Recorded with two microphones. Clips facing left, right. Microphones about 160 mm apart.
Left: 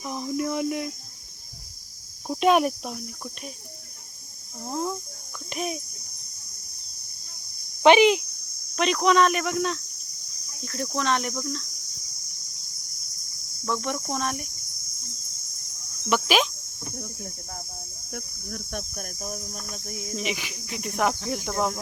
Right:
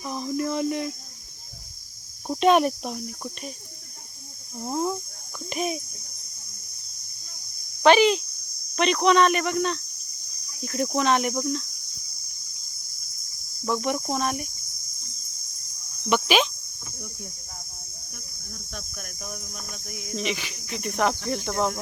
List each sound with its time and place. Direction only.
0.0 s speech: 15° left (ahead or behind)
2.4 s speech: 5° left (ahead or behind)
4.6 s speech: 5° right (ahead or behind)
7.8 s speech: 15° left (ahead or behind)
8.7 s speech: centre (ahead or behind)
10.6 s speech: 15° right (ahead or behind)
10.9 s cricket: 10° right (ahead or behind)
13.7 s cricket: 10° right (ahead or behind)
16.0 s speech: centre (ahead or behind)
18.1 s speech: 75° left (ahead or behind)
18.8 s cricket: 40° left (ahead or behind)
20.1 s speech: 10° left (ahead or behind)